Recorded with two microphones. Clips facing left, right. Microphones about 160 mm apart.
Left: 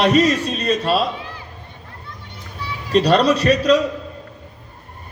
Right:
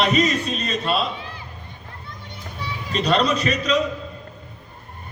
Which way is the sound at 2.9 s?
40° left (ahead or behind).